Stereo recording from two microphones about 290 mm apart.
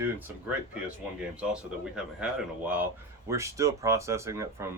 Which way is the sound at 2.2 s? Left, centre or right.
Centre.